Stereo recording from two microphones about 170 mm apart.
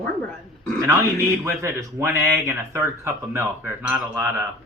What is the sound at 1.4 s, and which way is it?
A man's voice, 15° right (ahead or behind).